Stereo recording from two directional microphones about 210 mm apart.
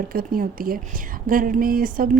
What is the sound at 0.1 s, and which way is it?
A woman's voice, 40° right (ahead or behind).